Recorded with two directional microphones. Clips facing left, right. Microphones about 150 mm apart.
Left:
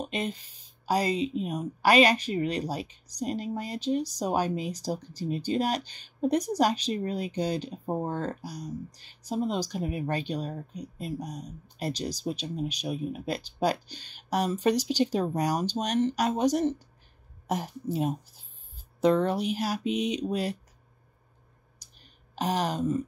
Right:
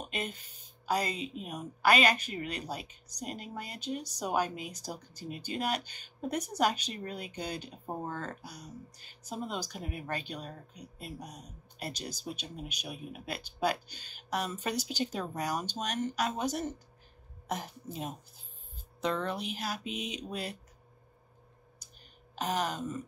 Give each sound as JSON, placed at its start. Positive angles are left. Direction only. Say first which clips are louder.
{"t": 0.1, "sound": "a woman's voice", "louder": "left 6 dB", "side_deg": 35}
{"t": 22.4, "sound": "a woman's voice", "louder": "left 5 dB", "side_deg": 35}